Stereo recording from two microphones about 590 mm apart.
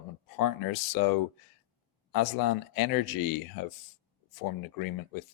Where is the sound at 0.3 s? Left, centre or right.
Left.